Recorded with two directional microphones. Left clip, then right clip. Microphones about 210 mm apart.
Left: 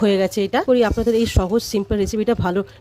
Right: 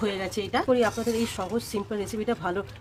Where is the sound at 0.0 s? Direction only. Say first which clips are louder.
Left 11 dB; 45° left (ahead or behind).